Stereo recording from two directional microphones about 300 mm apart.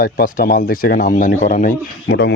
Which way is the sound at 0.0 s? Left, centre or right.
Left.